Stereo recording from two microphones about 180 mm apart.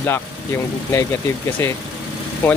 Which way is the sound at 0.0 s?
15° left (ahead or behind).